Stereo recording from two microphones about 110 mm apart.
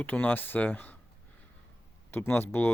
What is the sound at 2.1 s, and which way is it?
Speech, 20° left (ahead or behind).